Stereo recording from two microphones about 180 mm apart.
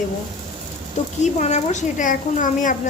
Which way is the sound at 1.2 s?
40° left (ahead or behind).